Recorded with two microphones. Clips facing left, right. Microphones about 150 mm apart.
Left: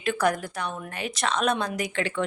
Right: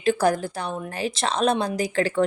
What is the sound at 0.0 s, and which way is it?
A woman's voice, 30° right (ahead or behind).